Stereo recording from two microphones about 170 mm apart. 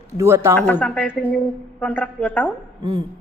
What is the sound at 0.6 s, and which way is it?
A man's voice, 10° left (ahead or behind).